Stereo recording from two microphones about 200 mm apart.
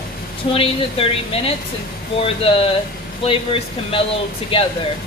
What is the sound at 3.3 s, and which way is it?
Speech, 25° left (ahead or behind).